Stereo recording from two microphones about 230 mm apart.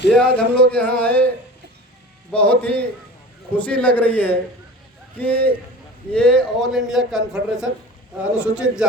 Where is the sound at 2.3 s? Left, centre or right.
Centre.